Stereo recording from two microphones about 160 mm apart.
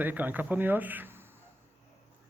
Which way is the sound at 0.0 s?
10° right (ahead or behind).